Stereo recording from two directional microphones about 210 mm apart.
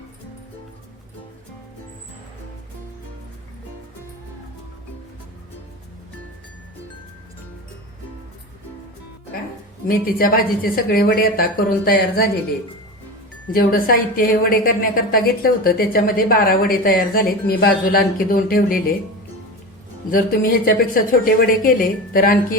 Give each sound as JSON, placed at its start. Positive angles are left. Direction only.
{"t": 9.8, "sound": "a woman's voice", "side_deg": 45}
{"t": 13.5, "sound": "a woman's voice", "side_deg": 45}
{"t": 20.1, "sound": "a woman's voice", "side_deg": 40}